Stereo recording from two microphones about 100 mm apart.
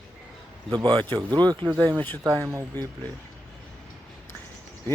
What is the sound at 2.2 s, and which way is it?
Speech, 30° right (ahead or behind).